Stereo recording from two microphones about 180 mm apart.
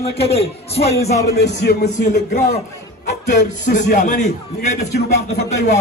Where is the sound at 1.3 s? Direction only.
70° left (ahead or behind).